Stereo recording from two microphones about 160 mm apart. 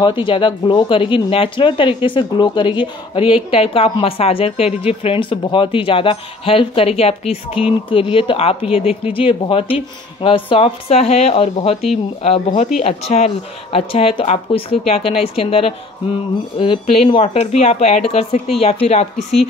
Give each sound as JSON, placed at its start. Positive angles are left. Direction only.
{"t": 0.0, "sound": "a woman's voice", "side_deg": 30}